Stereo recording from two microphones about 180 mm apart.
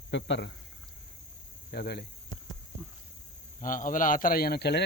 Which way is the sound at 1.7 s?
60° left (ahead or behind).